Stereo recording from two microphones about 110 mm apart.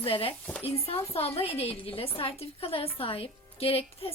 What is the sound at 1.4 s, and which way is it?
A woman's voice, 65° left (ahead or behind).